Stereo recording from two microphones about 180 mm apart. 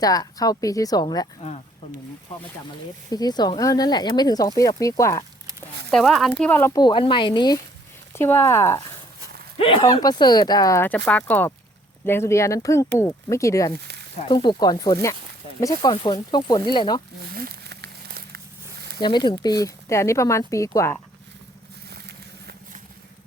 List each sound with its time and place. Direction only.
0.0 s speech: 20° left (ahead or behind)
1.4 s speech: 35° left (ahead or behind)
3.1 s speech: 20° left (ahead or behind)
5.9 s speech: centre (ahead or behind)
6.5 s speech: 15° left (ahead or behind)
8.1 s speech: 15° left (ahead or behind)
9.6 s speech: 30° left (ahead or behind)
17.3 s a sound: 55° right (ahead or behind)
18.9 s speech: 25° left (ahead or behind)
21.8 s vehicle: 65° right (ahead or behind)